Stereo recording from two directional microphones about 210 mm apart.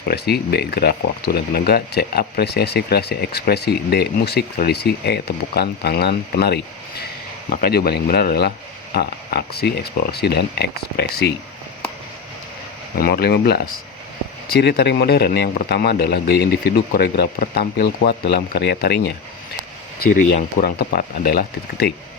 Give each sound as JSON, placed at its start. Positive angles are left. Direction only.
{"t": 0.1, "sound": "speech", "side_deg": 50}
{"t": 13.0, "sound": "speech", "side_deg": 45}
{"t": 14.6, "sound": "speech", "side_deg": 55}
{"t": 20.0, "sound": "speech", "side_deg": 40}